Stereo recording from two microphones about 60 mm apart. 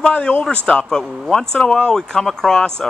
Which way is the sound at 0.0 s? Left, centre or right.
Centre.